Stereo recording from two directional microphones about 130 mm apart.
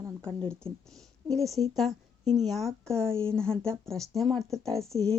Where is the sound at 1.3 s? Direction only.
5° left (ahead or behind).